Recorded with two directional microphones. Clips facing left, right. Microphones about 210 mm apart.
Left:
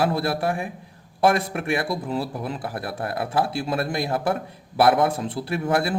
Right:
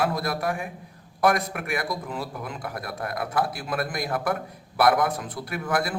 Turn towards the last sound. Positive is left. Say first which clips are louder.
# left 4 dB
turn(degrees=30)  # may be behind; listen again after turning